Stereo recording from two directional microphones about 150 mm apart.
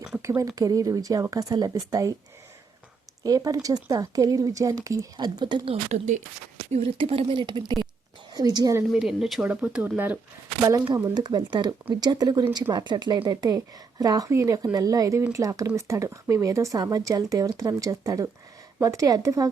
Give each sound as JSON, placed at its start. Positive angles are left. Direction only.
{"t": 0.2, "sound": "speech", "side_deg": -20}
{"t": 3.2, "sound": "speech", "side_deg": -25}
{"t": 7.0, "sound": "speech", "side_deg": -35}
{"t": 8.9, "sound": "speech", "side_deg": -5}
{"t": 10.6, "sound": "speech", "side_deg": -25}